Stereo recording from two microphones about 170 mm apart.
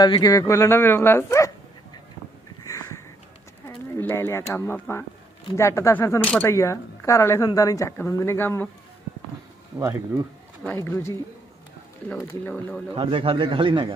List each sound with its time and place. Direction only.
0.0 s speech: 20° left (ahead or behind)
2.6 s a sound: 20° left (ahead or behind)
3.9 s speech: 15° left (ahead or behind)
10.6 s speech: 10° left (ahead or behind)
12.3 s speech: 10° left (ahead or behind)
12.9 s speech: 35° right (ahead or behind)